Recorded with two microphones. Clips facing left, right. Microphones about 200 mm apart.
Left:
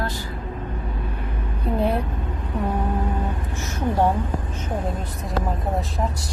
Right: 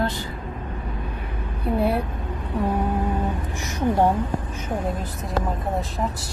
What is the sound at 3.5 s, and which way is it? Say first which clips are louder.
Speech: right 1 dB; 15° right (ahead or behind).